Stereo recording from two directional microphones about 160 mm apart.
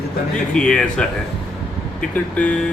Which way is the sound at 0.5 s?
5° left (ahead or behind).